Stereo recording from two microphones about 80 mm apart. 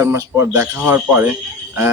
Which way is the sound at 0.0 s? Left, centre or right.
Right.